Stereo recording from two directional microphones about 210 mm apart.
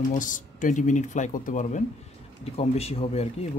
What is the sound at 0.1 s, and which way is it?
Speech, 40° left (ahead or behind).